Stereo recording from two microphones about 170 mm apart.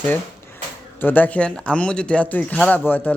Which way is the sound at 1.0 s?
10° left (ahead or behind).